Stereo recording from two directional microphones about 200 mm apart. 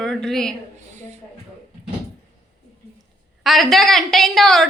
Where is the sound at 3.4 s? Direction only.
Centre (ahead or behind).